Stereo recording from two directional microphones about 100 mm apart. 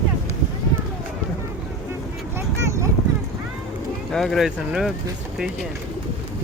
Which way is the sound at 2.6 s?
30° right (ahead or behind).